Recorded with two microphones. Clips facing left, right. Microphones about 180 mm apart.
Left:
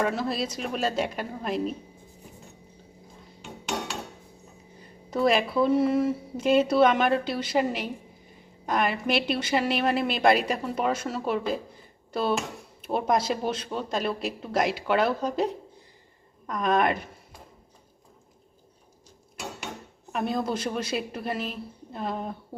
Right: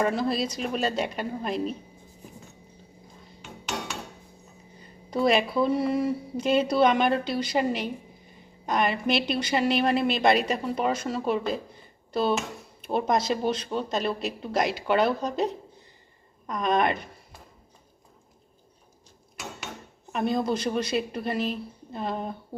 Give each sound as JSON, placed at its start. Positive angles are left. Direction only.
{"t": 0.0, "sound": "a woman's voice", "side_deg": 0}
{"t": 5.1, "sound": "a woman's voice", "side_deg": 0}
{"t": 20.1, "sound": "a woman's voice", "side_deg": 5}